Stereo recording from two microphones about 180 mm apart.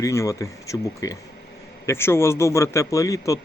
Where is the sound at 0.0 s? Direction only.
15° left (ahead or behind).